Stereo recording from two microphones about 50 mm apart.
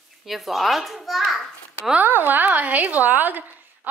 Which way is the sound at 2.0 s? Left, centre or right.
Right.